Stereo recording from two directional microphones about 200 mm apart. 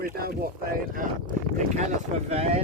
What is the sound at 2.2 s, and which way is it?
Speech, 30° right (ahead or behind).